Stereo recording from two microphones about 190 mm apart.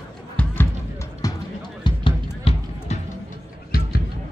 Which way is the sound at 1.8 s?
30° left (ahead or behind).